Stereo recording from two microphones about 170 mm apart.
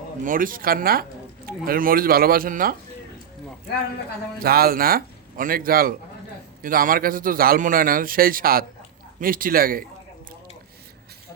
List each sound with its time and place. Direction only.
0.2 s a man's voice: 55° right (ahead or behind)
4.4 s a man's voice: 60° right (ahead or behind)